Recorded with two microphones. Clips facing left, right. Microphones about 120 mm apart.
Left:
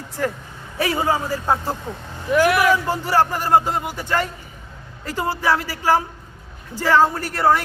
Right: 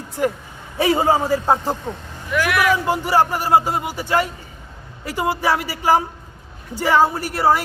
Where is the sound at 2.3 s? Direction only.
40° left (ahead or behind).